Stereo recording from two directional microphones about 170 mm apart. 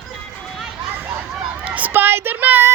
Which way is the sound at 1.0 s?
10° right (ahead or behind).